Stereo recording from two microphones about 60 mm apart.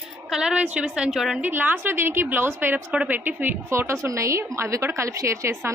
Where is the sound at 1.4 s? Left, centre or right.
Right.